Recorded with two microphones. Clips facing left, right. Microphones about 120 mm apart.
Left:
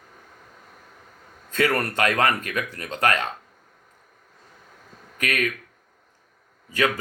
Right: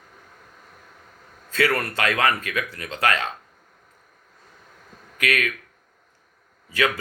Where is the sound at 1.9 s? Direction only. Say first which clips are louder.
Left 1 dB; 50° left (ahead or behind).